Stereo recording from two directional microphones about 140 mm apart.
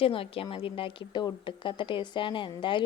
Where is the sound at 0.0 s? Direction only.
40° left (ahead or behind).